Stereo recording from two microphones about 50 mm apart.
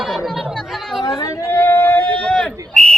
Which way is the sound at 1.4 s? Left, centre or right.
Left.